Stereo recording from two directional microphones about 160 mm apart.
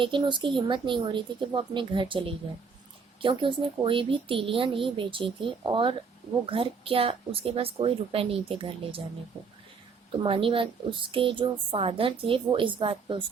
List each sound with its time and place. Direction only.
0.0 s a woman's voice: 30° right (ahead or behind)
10.1 s a woman's voice: 35° right (ahead or behind)